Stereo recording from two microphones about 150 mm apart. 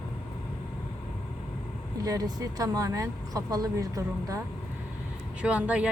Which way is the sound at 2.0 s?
25° right (ahead or behind).